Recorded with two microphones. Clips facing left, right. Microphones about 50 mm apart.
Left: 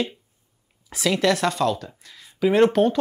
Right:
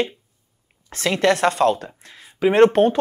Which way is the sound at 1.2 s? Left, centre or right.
Right.